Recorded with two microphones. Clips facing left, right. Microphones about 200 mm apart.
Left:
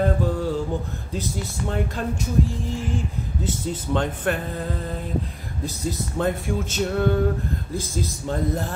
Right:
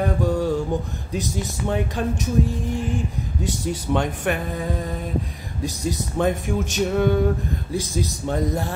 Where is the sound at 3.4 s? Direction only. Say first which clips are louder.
Right 2 dB; 15° right (ahead or behind).